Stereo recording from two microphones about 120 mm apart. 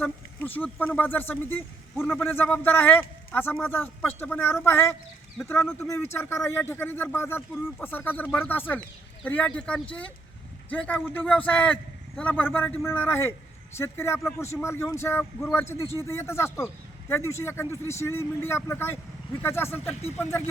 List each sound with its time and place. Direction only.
0.0 s speech: 15° left (ahead or behind)